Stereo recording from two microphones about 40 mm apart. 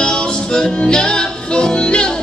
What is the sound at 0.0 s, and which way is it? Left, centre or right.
Music, centre.